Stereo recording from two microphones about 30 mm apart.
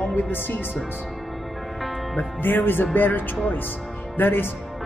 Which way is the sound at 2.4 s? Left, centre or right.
Left.